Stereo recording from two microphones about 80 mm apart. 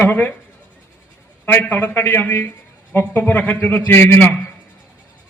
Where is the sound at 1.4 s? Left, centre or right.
Left.